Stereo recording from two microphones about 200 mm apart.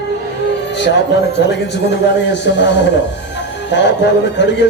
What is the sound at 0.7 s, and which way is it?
Speech, 60° left (ahead or behind).